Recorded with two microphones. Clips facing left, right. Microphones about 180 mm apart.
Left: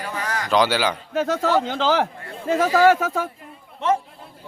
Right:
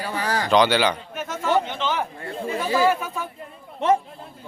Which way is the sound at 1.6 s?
90° left.